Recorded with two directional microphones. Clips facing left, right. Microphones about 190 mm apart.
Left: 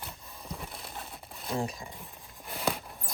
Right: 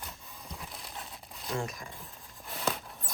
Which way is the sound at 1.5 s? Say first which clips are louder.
Left 2 dB; 30° left (ahead or behind).